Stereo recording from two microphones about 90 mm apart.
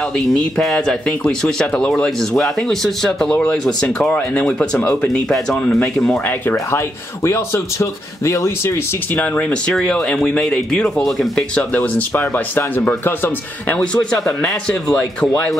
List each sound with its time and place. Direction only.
0.1 s speech: 5° left (ahead or behind)
7.2 s speech: 30° left (ahead or behind)
9.1 s speech: 20° left (ahead or behind)
13.7 s speech: 10° left (ahead or behind)